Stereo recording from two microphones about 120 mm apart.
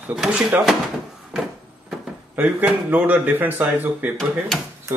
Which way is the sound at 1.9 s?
10° right (ahead or behind).